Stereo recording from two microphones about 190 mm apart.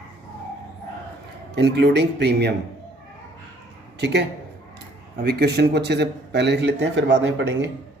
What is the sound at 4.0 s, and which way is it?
Speech, 60° right (ahead or behind).